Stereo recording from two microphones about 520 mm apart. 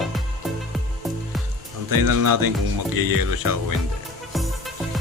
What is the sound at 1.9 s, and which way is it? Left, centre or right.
Speech, right.